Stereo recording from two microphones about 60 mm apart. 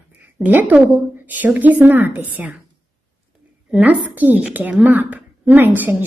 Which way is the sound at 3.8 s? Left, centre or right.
Right.